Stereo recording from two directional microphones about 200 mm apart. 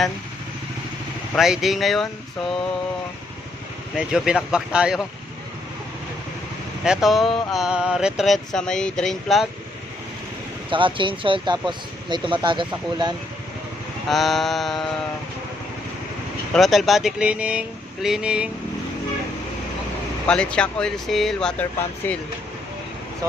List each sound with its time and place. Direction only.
1.4 s speech: centre (ahead or behind)
3.9 s speech: 5° right (ahead or behind)
6.8 s speech: centre (ahead or behind)
10.7 s speech: 25° right (ahead or behind)
14.1 s speech: centre (ahead or behind)
16.5 s speech: centre (ahead or behind)
20.2 s speech: 5° left (ahead or behind)